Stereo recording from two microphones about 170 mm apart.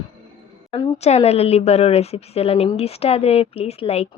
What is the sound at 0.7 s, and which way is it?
Speech, 25° left (ahead or behind).